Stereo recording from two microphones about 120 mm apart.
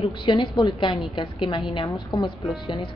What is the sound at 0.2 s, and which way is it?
A woman's voice, 45° left (ahead or behind).